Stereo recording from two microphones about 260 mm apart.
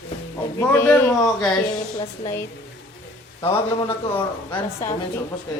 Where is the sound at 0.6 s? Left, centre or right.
Centre.